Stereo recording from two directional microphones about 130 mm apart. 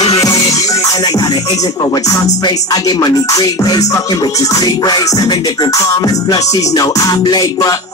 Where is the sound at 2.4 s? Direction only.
30° left (ahead or behind).